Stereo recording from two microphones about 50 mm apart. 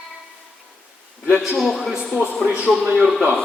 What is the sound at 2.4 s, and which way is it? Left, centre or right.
Speech, right.